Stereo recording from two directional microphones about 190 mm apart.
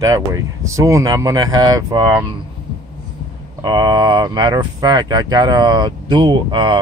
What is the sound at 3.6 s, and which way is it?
Speech, 20° right (ahead or behind).